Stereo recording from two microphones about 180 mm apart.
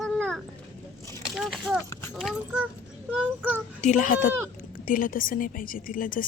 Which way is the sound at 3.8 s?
45° left (ahead or behind).